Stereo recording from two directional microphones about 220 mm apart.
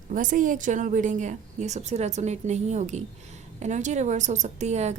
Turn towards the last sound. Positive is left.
turn(degrees=-30)  # may be behind; listen again after turning